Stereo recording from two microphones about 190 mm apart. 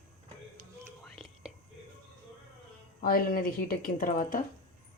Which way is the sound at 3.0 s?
50° left (ahead or behind).